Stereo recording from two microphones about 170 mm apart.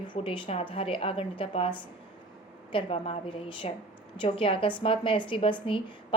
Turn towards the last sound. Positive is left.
turn(degrees=30)  # may be behind; listen again after turning